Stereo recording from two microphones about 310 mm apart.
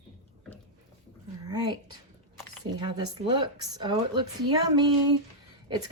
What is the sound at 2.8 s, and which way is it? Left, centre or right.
Speech, centre.